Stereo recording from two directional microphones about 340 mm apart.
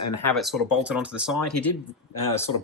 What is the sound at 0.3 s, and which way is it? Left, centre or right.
Speech, centre.